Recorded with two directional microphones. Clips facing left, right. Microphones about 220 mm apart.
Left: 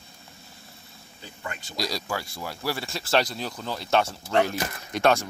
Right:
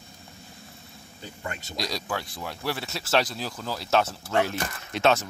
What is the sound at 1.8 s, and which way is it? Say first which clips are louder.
Speech: left 1 dB; centre (ahead or behind).